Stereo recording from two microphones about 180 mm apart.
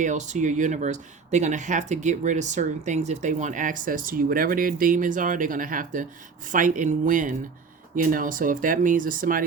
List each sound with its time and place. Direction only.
0.0 s speech: 40° right (ahead or behind)